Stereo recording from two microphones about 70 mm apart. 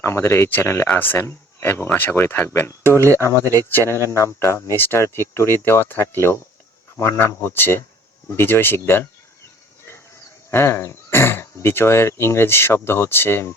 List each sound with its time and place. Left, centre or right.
0.0 s speech: left
2.8 s speech: right
3.2 s speech: left
10.5 s speech: left